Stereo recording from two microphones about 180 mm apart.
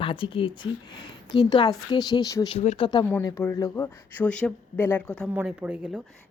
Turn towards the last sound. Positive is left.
turn(degrees=-10)  # may be behind; listen again after turning